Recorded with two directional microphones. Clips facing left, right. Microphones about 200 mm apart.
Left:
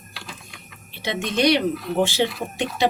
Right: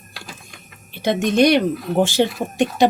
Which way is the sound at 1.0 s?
50° right (ahead or behind).